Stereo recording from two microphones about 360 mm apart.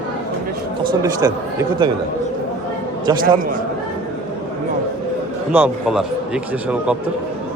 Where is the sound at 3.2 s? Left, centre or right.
Right.